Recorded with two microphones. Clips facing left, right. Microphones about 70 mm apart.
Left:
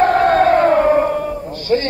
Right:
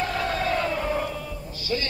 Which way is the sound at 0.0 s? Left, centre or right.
Left.